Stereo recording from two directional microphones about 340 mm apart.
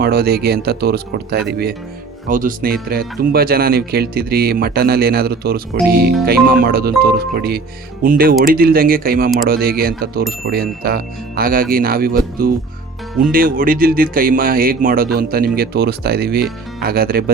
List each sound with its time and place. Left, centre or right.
0.0 s speech: right